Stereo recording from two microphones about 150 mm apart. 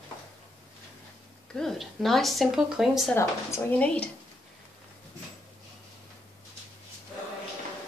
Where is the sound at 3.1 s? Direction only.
15° left (ahead or behind).